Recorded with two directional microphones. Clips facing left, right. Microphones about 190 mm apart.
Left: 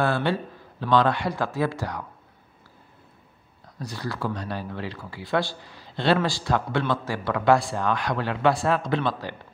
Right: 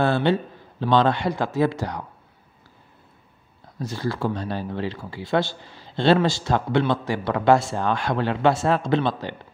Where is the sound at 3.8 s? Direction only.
25° right (ahead or behind).